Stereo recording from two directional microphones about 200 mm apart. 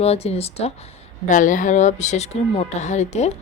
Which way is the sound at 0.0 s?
30° left (ahead or behind).